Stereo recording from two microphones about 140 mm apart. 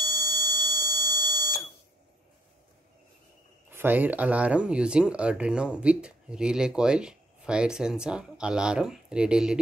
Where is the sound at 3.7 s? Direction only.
15° right (ahead or behind).